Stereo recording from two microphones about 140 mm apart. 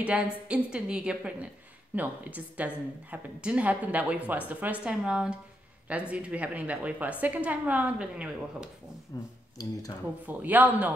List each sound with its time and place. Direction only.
0.5 s a woman's voice: 5° right (ahead or behind)
9.1 s speech: 25° left (ahead or behind)
10.2 s a woman's voice: 10° right (ahead or behind)